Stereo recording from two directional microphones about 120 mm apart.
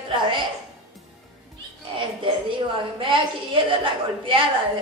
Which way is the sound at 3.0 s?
45° right (ahead or behind).